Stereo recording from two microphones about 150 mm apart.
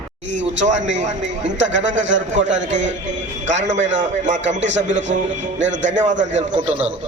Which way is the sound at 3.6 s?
55° right (ahead or behind).